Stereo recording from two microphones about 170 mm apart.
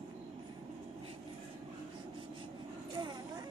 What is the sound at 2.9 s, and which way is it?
Vehicle, 25° right (ahead or behind).